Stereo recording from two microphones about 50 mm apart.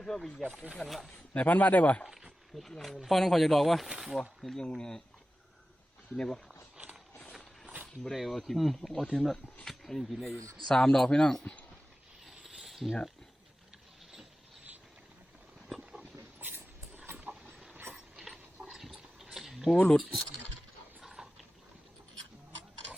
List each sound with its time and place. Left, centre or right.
0.0 s speech: centre
1.3 s speech: left
2.6 s speech: centre
6.1 s speech: centre
8.0 s speech: centre
10.7 s speech: centre
12.2 s pulleys: centre
15.8 s dog: right
16.4 s dog: right
17.9 s a sound: centre
19.7 s speech: centre
21.0 s mechanisms: centre